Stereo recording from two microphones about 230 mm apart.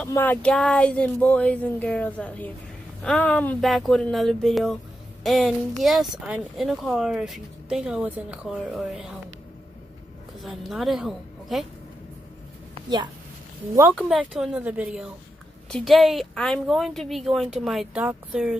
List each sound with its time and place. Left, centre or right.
0.0 s speech: centre
10.4 s speech: centre
12.7 s speech: centre
13.9 s speech: centre